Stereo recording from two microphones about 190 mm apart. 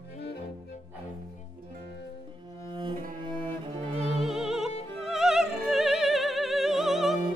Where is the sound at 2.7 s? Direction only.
25° right (ahead or behind).